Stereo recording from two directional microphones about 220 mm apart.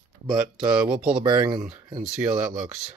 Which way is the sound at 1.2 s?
20° right (ahead or behind).